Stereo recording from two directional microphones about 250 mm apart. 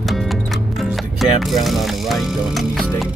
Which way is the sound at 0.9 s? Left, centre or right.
Centre.